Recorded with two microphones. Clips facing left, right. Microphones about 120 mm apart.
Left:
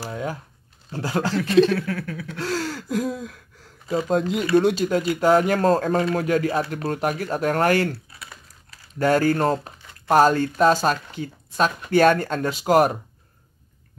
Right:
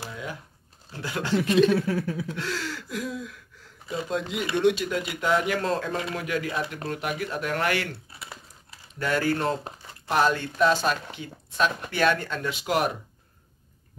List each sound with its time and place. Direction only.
0.1 s crumpling: 45° left (ahead or behind)
0.9 s speech: 40° left (ahead or behind)
1.7 s a sound: 25° right (ahead or behind)
2.3 s speech: 40° left (ahead or behind)
8.1 s typing: 25° right (ahead or behind)
8.9 s speech: 40° left (ahead or behind)